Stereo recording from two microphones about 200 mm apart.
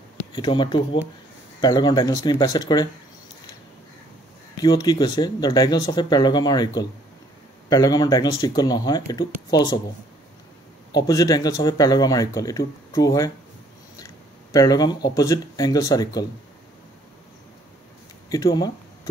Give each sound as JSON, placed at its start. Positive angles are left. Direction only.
{"t": 0.3, "sound": "speech", "side_deg": 20}
{"t": 4.6, "sound": "speech", "side_deg": 20}
{"t": 11.1, "sound": "speech", "side_deg": 20}
{"t": 13.9, "sound": "a sound", "side_deg": 15}
{"t": 15.1, "sound": "speech", "side_deg": 15}
{"t": 18.3, "sound": "speech", "side_deg": 20}